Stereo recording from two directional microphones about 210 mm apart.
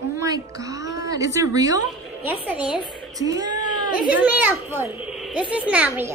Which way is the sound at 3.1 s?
15° right (ahead or behind).